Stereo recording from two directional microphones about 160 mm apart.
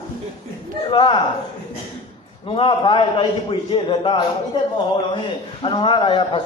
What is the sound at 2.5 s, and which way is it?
A man's voice, 35° left (ahead or behind).